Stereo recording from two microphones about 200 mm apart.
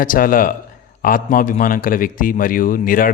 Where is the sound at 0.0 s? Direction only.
45° left (ahead or behind).